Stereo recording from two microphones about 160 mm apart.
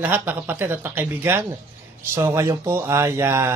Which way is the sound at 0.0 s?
15° right (ahead or behind).